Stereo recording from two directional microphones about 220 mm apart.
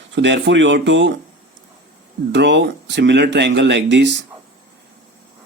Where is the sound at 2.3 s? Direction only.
55° right (ahead or behind).